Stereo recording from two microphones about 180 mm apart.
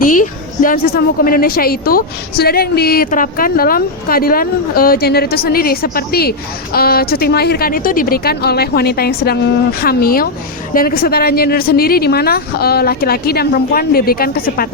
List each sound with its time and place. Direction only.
0.0 s a woman's voice: 50° left (ahead or behind)